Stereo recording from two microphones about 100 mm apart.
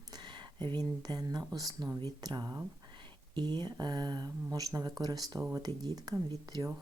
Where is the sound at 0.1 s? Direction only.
45° right (ahead or behind).